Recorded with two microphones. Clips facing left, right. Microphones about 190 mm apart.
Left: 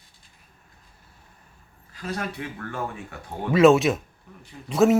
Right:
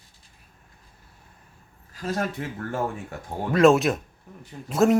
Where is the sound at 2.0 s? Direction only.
45° right (ahead or behind).